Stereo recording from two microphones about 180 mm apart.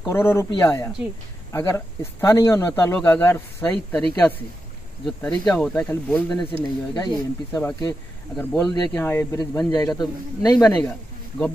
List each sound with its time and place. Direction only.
0.0 s speech: 15° left (ahead or behind)
5.0 s speech: 5° left (ahead or behind)
6.3 s a man's voice: 20° left (ahead or behind)
8.4 s a man's voice: 5° left (ahead or behind)